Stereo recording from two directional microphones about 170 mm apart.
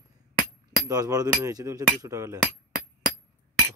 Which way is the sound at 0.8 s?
20° right (ahead or behind).